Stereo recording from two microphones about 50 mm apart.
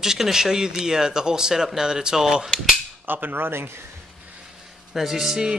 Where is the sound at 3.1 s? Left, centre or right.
Right.